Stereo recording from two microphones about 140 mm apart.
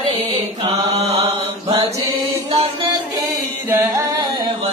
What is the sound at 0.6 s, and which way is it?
Mantra, 45° right (ahead or behind).